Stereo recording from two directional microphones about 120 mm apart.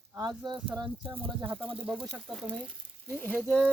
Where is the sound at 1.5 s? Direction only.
50° right (ahead or behind).